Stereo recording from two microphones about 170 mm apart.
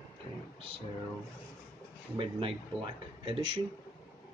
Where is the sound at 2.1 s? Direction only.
30° right (ahead or behind).